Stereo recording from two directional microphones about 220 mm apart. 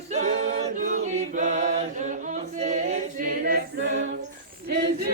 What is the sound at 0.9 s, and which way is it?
Choir, 35° right (ahead or behind).